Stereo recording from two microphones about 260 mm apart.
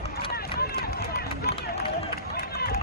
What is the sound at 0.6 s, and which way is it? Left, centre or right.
Run, left.